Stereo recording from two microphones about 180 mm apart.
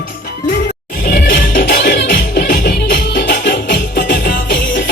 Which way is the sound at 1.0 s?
55° left (ahead or behind).